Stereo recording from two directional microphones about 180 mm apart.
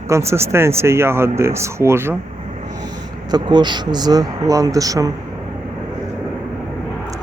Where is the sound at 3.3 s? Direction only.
25° right (ahead or behind).